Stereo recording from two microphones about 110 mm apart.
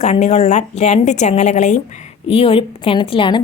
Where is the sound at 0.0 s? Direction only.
90° left.